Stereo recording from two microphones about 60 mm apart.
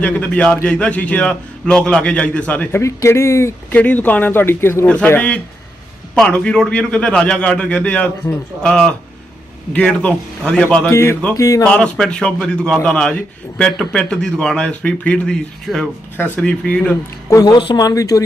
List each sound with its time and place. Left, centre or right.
0.0 s a man's voice: left
2.7 s speech: left
3.7 s speech: left
6.1 s a man's voice: centre
10.9 s speech: left
11.3 s speech: left
11.6 s speech: centre
16.1 s a man's voice: left
17.2 s speech: left